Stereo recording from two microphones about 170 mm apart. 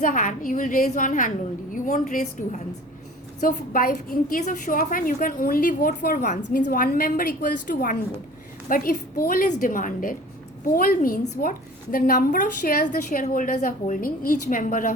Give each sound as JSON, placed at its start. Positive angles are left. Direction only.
{"t": 0.0, "sound": "a woman's voice", "side_deg": 50}